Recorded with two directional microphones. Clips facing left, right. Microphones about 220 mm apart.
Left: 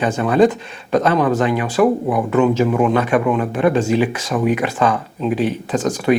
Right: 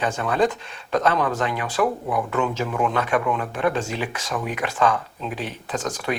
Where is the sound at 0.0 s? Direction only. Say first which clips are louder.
Left 7 dB; 10° left (ahead or behind).